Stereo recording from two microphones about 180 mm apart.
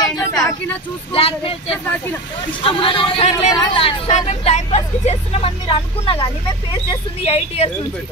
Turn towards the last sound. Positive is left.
turn(degrees=35)  # may be behind; listen again after turning